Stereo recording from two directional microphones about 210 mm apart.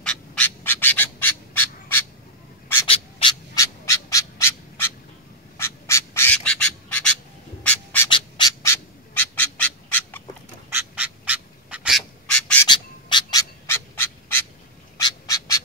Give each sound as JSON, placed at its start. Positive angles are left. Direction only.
{"t": 0.0, "sound": "bird", "side_deg": 5}
{"t": 2.9, "sound": "a sound", "side_deg": 25}
{"t": 3.5, "sound": "bird", "side_deg": 15}
{"t": 5.6, "sound": "duck", "side_deg": 10}
{"t": 8.1, "sound": "bird", "side_deg": 20}
{"t": 10.7, "sound": "duck", "side_deg": -10}
{"t": 12.6, "sound": "bird", "side_deg": 20}